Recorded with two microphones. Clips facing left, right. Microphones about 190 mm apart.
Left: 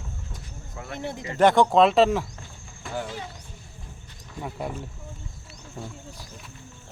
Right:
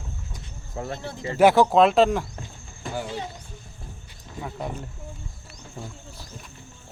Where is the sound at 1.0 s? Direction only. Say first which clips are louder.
Left 3 dB; 20° left (ahead or behind).